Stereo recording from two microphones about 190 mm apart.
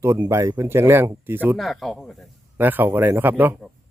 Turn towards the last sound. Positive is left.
turn(degrees=0)  # may be behind; listen again after turning